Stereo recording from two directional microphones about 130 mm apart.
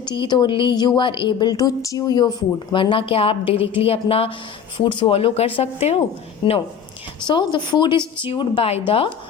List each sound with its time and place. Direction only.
0.0 s a woman's voice: 35° left (ahead or behind); by 6.0 s 50° left (ahead or behind)
6.4 s a woman's voice: 40° left (ahead or behind)